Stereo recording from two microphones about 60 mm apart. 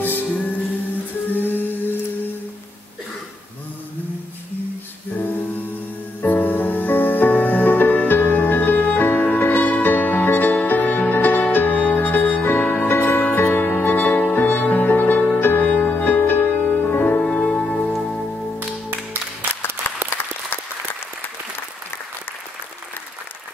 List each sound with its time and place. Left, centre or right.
0.0 s music: left
5.1 s music: left
17.2 s music: centre
19.9 s applause: left